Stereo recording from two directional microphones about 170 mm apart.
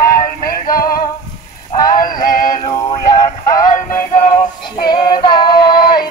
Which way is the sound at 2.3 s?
50° left (ahead or behind).